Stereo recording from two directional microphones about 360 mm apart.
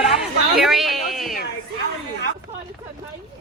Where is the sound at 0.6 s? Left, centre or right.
Centre.